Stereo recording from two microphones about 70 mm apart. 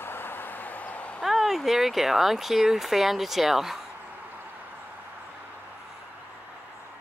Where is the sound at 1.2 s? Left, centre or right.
Centre.